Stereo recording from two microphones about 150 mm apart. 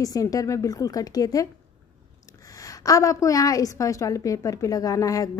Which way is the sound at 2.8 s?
20° left (ahead or behind).